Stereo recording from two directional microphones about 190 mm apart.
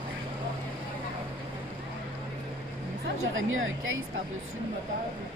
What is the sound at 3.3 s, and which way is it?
Speech, 90° right.